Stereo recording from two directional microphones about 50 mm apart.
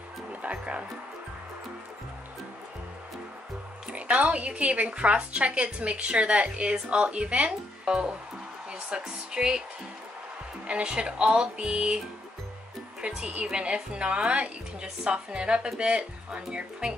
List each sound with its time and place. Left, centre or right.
0.3 s music: right
3.9 s a woman's voice: right
10.7 s a woman's voice: right
13.0 s a woman's voice: right